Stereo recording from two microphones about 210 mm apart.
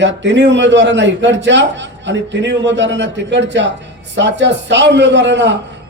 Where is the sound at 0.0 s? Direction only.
60° right (ahead or behind).